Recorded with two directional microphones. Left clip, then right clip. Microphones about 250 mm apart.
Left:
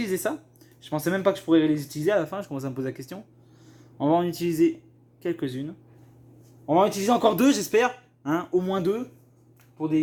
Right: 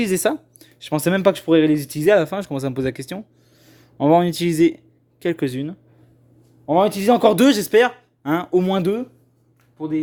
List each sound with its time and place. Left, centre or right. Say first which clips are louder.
0.0 s speech: right 8 dB; right
9.7 s speech: right 1 dB; right